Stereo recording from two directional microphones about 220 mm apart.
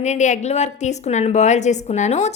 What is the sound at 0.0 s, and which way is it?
A woman's voice, 30° left (ahead or behind).